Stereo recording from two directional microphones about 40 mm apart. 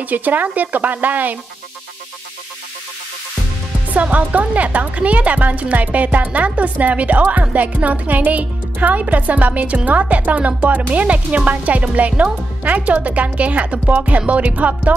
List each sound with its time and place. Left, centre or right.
0.0 s speech: right
3.9 s speech: right